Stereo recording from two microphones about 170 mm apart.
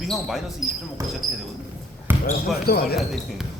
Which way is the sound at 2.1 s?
15° right (ahead or behind).